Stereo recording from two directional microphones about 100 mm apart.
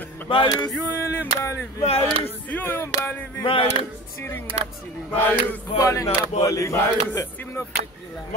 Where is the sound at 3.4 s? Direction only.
65° left (ahead or behind).